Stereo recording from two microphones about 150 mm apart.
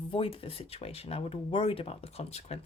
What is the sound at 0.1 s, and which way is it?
Speech, 40° left (ahead or behind).